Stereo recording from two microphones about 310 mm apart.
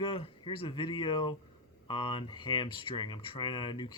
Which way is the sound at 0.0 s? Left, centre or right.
Centre.